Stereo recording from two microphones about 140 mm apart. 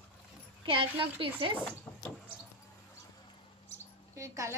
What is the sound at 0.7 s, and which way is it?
Speech, 40° right (ahead or behind).